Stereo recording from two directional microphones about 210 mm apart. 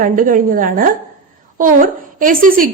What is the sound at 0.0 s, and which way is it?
A woman's voice, 40° right (ahead or behind).